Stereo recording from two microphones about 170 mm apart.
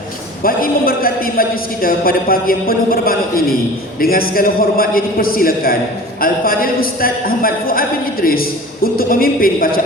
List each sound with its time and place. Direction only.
0.4 s a man's voice: 60° left (ahead or behind)